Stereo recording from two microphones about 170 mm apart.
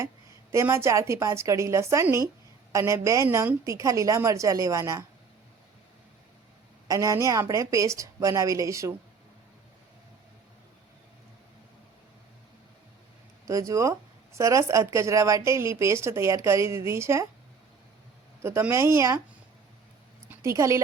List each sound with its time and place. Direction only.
0.5 s a woman's voice: 15° right (ahead or behind)
6.8 s a woman's voice: 20° right (ahead or behind)
13.5 s a woman's voice: 20° right (ahead or behind)
18.4 s a woman's voice: 15° right (ahead or behind)
20.3 s a woman's voice: 15° right (ahead or behind)